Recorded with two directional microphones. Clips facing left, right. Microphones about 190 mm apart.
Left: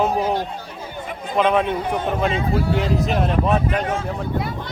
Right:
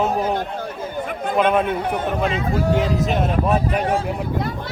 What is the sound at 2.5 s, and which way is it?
Speech, 45° right (ahead or behind).